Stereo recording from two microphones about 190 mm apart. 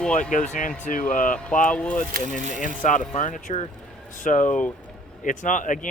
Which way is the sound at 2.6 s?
45° left (ahead or behind).